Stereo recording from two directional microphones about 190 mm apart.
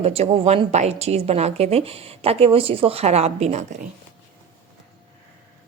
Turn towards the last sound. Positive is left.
turn(degrees=-40)  # may be behind; listen again after turning